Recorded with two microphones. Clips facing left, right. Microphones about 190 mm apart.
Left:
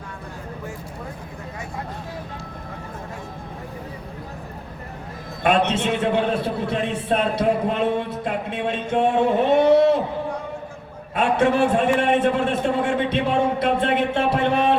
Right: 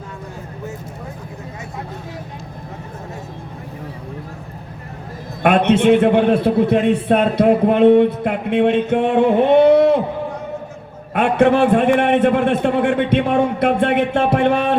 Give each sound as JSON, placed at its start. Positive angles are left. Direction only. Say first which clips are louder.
{"t": 5.4, "sound": "a man's voice", "louder": "right 6 dB", "side_deg": -55}
{"t": 11.1, "sound": "a man's voice", "louder": "right 5 dB", "side_deg": -60}